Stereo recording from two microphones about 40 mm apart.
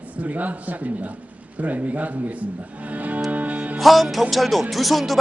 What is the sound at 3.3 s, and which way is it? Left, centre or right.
Music, right.